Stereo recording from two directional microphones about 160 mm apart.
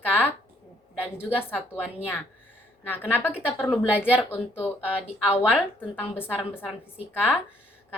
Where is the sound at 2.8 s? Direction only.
10° left (ahead or behind).